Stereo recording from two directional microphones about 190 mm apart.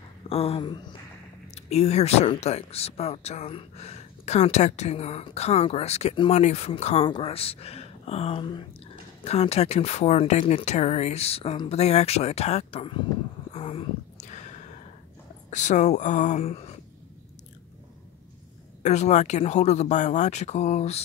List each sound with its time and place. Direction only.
0.3 s speech: 30° left (ahead or behind)
1.5 s speech: 35° left (ahead or behind)
13.5 s a sound: 30° left (ahead or behind)
15.5 s speech: 40° left (ahead or behind)
18.8 s speech: 35° left (ahead or behind)